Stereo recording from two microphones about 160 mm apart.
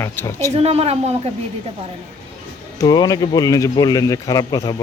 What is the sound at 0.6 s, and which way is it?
Speech, 40° right (ahead or behind).